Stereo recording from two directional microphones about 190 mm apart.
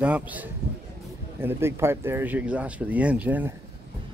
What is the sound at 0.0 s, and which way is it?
Speech, 10° right (ahead or behind).